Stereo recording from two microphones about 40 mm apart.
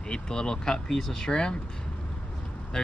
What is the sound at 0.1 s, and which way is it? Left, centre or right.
Speech, centre.